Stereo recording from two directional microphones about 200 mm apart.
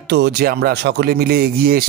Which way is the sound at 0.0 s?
55° right (ahead or behind).